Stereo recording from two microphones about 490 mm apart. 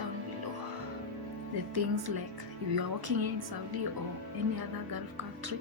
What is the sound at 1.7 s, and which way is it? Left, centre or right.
Speech, right.